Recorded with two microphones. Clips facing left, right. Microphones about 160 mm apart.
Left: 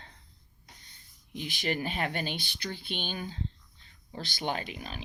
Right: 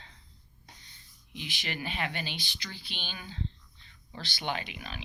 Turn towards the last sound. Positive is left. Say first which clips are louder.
# left 1 dB
turn(degrees=40)  # may be behind; listen again after turning